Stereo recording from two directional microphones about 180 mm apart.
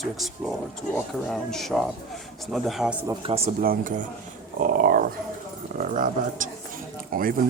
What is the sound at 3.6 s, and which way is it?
Speech, 50° right (ahead or behind).